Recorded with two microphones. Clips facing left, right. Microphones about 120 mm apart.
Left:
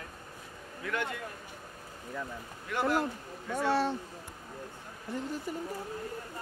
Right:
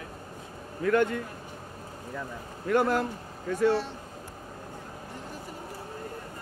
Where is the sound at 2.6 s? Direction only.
50° right (ahead or behind).